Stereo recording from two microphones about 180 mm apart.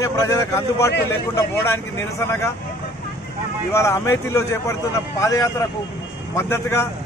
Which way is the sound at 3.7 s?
15° left (ahead or behind).